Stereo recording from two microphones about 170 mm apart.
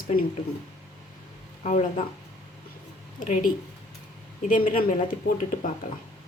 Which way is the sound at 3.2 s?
50° left (ahead or behind).